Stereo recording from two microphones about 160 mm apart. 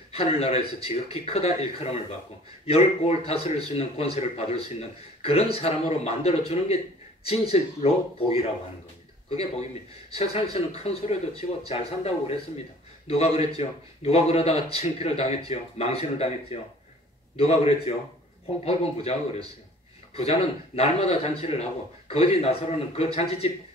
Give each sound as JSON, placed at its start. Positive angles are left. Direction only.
{"t": 0.1, "sound": "speech", "side_deg": 40}
{"t": 10.1, "sound": "a man's voice", "side_deg": 40}
{"t": 20.2, "sound": "speech", "side_deg": 40}